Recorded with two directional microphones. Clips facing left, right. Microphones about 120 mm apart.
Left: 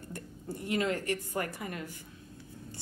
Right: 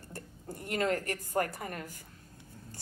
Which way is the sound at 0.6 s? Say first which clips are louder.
Even; 45° right (ahead or behind).